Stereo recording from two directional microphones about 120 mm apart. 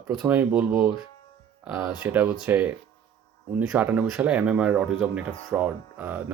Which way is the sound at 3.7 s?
15° right (ahead or behind).